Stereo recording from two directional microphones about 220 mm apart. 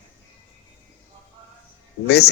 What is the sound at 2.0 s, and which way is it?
Speech, 50° left (ahead or behind).